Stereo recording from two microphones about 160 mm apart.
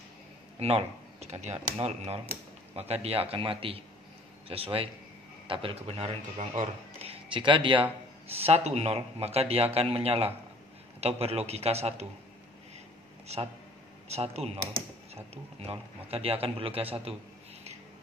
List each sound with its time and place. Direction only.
0.6 s a man's voice: 40° right (ahead or behind)
13.3 s a man's voice: 45° right (ahead or behind)
16.1 s a man's voice: 40° right (ahead or behind)